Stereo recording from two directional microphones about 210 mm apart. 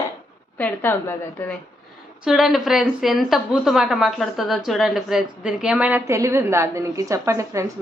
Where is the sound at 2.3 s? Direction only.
Centre (ahead or behind).